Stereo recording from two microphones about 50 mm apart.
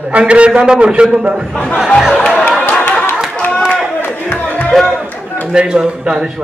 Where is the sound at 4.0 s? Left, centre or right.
Left.